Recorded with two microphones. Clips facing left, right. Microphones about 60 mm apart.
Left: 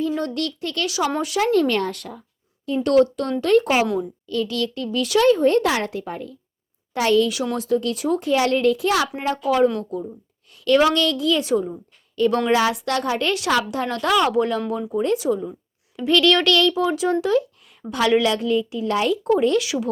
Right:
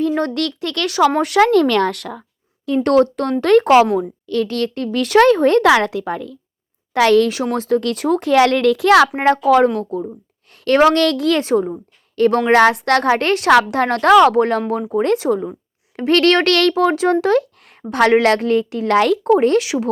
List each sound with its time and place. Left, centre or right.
0.0 s speech: right
1.1 s a woman's voice: right
1.4 s speech: right
2.6 s speech: right
2.9 s a woman's voice: right
3.4 s speech: right
6.9 s speech: right
7.3 s a woman's voice: right
7.8 s speech: right
10.5 s a woman's voice: right
11.4 s a woman's voice: right
13.5 s speech: right
17.9 s speech: right
19.5 s speech: right